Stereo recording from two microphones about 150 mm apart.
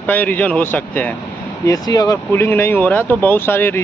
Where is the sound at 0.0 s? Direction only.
10° left (ahead or behind).